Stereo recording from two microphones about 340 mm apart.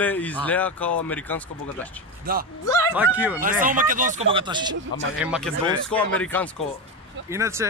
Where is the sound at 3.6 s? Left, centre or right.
Right.